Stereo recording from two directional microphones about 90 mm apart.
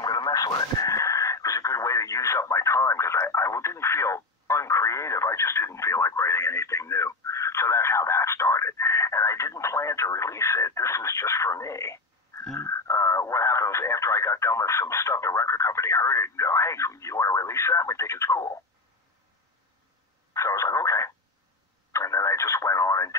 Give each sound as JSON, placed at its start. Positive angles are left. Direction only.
{"t": 0.0, "sound": "radio", "side_deg": 45}
{"t": 20.3, "sound": "a sound", "side_deg": 35}
{"t": 21.9, "sound": "radio", "side_deg": 35}